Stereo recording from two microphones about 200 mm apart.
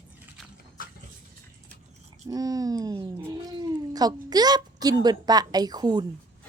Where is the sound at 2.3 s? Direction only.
20° right (ahead or behind).